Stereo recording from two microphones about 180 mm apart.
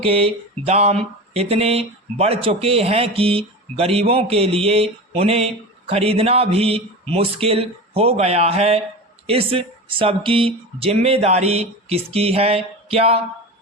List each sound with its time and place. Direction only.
0.0 s speech: 30° right (ahead or behind)